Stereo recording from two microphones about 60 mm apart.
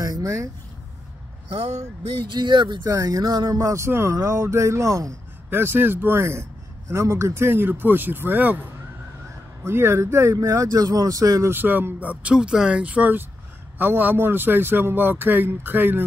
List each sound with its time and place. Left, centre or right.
0.0 s a sound: right
2.4 s music: right
3.7 s speech: right
4.1 s a sound: right
5.5 s speech: right
9.7 s speech: right
10.4 s speech: right
11.4 s speech: right